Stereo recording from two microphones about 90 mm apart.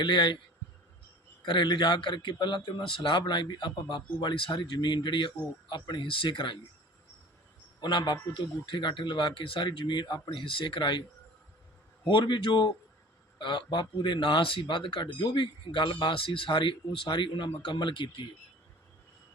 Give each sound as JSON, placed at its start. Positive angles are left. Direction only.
{"t": 0.0, "sound": "speech", "side_deg": 60}
{"t": 1.5, "sound": "speech", "side_deg": 60}
{"t": 7.8, "sound": "speech", "side_deg": 60}
{"t": 12.0, "sound": "speech", "side_deg": 65}